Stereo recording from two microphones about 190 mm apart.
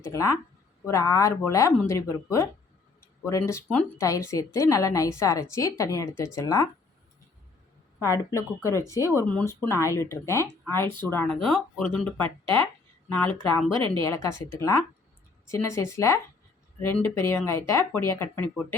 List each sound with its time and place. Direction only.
0.0 s a woman's voice: 15° left (ahead or behind)
8.3 s a woman's voice: 15° left (ahead or behind)
11.3 s a woman's voice: centre (ahead or behind)